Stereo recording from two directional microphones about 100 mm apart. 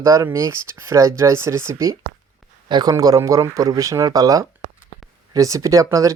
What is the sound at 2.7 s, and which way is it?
Speech, 50° right (ahead or behind).